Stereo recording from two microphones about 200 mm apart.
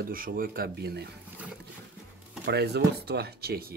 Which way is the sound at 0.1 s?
45° right (ahead or behind).